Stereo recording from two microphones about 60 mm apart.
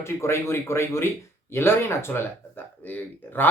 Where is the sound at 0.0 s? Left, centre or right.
Left.